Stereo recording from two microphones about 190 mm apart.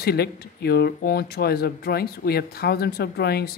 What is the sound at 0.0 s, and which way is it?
Speech, 55° left (ahead or behind).